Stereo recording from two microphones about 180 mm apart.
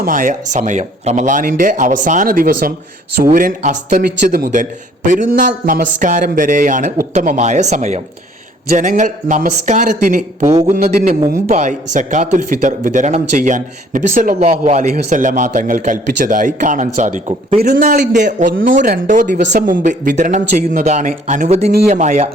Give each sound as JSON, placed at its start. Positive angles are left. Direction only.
{"t": 0.0, "sound": "speech", "side_deg": -50}
{"t": 10.4, "sound": "speech", "side_deg": -20}
{"t": 10.8, "sound": "speech", "side_deg": -50}